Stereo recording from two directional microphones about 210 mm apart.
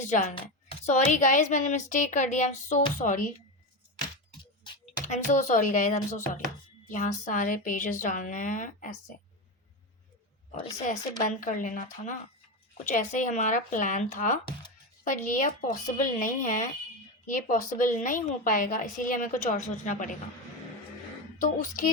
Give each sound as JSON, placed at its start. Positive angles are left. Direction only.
{"t": 0.0, "sound": "a woman's voice", "side_deg": 35}
{"t": 5.0, "sound": "a woman's voice", "side_deg": 35}
{"t": 10.8, "sound": "a woman's voice", "side_deg": 40}
{"t": 21.4, "sound": "a woman's voice", "side_deg": 40}